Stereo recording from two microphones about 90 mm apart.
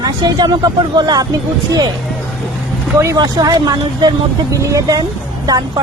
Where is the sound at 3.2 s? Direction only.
50° right (ahead or behind).